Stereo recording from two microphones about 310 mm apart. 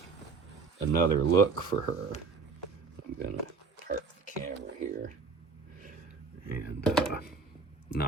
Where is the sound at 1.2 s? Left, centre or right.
Right.